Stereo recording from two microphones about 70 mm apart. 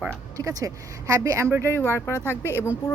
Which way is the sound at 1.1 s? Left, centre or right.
Right.